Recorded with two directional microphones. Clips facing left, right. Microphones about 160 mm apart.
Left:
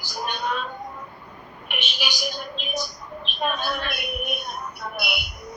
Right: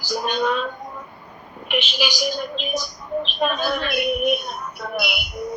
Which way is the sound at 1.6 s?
90° right.